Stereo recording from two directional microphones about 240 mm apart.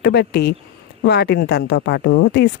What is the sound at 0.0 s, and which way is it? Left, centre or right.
Speech, left.